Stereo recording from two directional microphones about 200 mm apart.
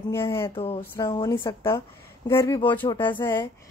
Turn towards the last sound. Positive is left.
turn(degrees=25)  # may be behind; listen again after turning